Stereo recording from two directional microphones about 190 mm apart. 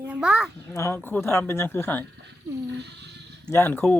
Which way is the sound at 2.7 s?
65° right (ahead or behind).